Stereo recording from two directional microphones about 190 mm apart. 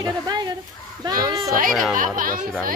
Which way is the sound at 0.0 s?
20° right (ahead or behind).